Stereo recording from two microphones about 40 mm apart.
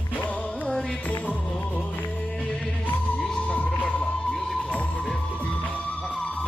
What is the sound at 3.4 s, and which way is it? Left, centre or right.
Music, left.